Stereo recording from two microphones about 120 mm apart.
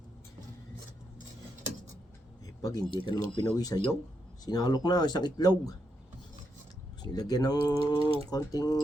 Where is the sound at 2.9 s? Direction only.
40° left (ahead or behind).